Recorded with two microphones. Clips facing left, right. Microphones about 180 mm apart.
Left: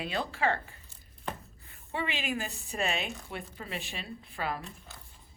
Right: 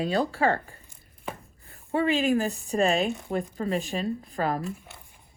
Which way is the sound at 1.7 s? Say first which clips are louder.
Right 11 dB; 35° right (ahead or behind).